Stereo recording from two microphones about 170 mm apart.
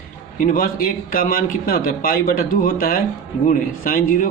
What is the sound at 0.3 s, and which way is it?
A man's voice, 55° left (ahead or behind).